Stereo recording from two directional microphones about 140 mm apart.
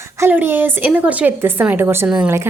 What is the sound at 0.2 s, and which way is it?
A woman's voice, 15° right (ahead or behind).